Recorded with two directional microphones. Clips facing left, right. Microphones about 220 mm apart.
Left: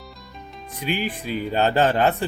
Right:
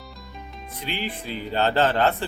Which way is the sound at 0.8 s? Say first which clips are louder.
Left 5 dB; 15° left (ahead or behind).